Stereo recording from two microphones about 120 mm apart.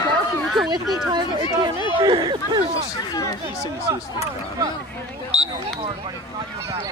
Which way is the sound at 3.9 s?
30° right (ahead or behind).